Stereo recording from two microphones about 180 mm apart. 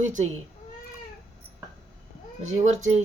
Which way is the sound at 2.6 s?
40° right (ahead or behind).